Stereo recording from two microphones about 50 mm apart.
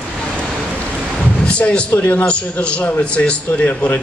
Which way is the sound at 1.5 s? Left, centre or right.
Left.